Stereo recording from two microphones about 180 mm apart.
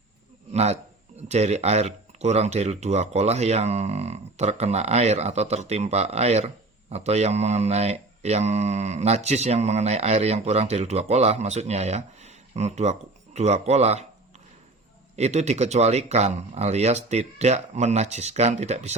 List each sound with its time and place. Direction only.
0.5 s speech: 35° right (ahead or behind)
15.1 s speech: 40° right (ahead or behind)